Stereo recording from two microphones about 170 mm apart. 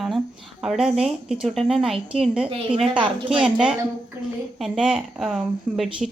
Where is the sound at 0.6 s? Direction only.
5° right (ahead or behind).